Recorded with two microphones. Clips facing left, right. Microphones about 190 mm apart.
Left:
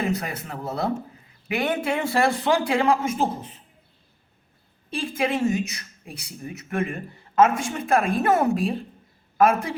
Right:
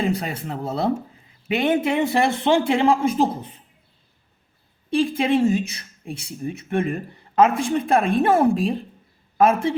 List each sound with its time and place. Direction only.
0.0 s speech: 30° right (ahead or behind)
4.9 s speech: 30° right (ahead or behind)